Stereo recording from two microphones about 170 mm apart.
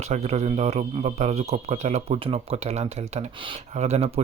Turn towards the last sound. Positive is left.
turn(degrees=-40)  # may be behind; listen again after turning